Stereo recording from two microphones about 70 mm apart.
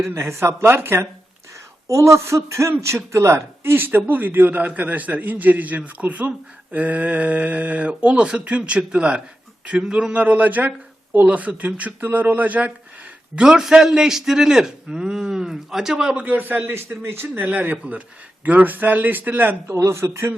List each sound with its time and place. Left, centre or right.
0.0 s speech: right
13.3 s a man's voice: centre; by 19.7 s right
19.7 s speech: right